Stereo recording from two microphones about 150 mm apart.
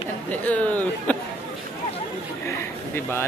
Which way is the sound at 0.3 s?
10° left (ahead or behind).